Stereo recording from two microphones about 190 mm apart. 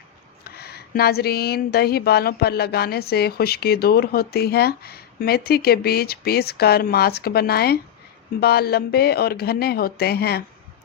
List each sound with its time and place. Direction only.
0.4 s speech: 55° left (ahead or behind)